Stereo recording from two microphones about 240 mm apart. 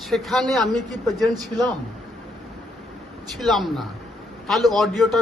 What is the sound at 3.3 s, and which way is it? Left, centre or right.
Speech, centre.